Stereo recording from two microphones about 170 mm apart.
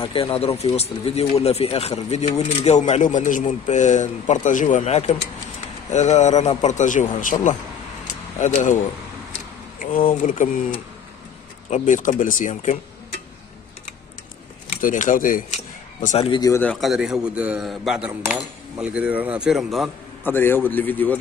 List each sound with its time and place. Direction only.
0.0 s speech: 30° left (ahead or behind); by 12.7 s 50° left (ahead or behind)
14.8 s speech: 50° left (ahead or behind)
16.3 s speech: 20° left (ahead or behind)
16.6 s speech: centre (ahead or behind)
20.2 s speech: 10° left (ahead or behind)